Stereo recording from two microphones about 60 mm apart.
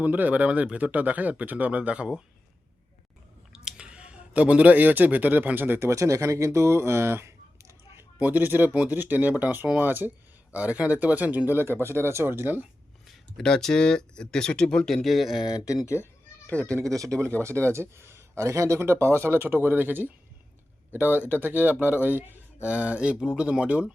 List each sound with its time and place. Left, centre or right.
0.0 s speech: right
3.5 s speech: centre; by 5.8 s right
5.8 s speech: right
8.2 s speech: right
10.5 s speech: right
13.1 s speech: centre
15.5 s speech: left
16.6 s speech: centre
17.1 s speech: left
17.4 s speech: right